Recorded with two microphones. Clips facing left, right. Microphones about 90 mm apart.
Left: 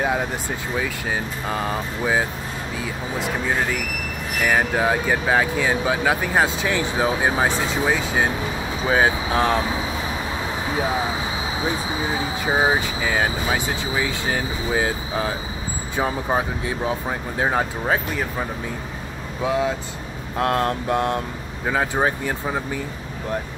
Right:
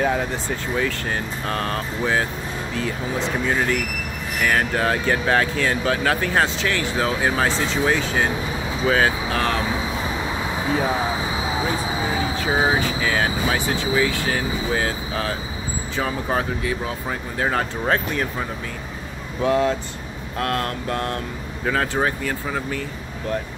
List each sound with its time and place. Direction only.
0.0 s speech: 10° left (ahead or behind)
3.4 s speech: 10° left (ahead or behind)
12.4 s speech: 10° left (ahead or behind)
17.8 s speech: 5° left (ahead or behind)
19.4 s speech: 10° left (ahead or behind)
20.3 s speech: 25° left (ahead or behind)